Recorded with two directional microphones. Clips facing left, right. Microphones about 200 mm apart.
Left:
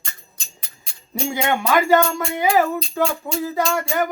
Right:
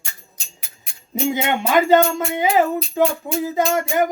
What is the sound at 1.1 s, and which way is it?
Speech, 20° right (ahead or behind).